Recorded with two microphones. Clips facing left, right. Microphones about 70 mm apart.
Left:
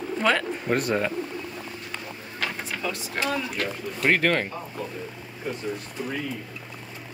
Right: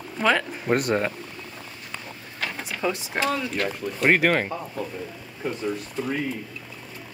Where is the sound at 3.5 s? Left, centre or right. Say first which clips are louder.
Right 3 dB; centre.